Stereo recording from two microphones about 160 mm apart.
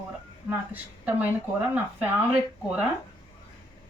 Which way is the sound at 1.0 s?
10° right (ahead or behind).